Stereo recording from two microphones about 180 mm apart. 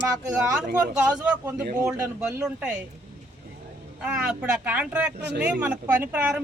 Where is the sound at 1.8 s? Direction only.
10° right (ahead or behind).